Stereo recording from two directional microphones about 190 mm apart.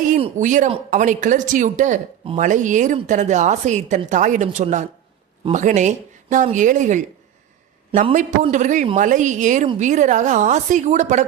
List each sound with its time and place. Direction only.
0.2 s a woman's voice: 40° right (ahead or behind)
8.1 s a woman's voice: 40° right (ahead or behind)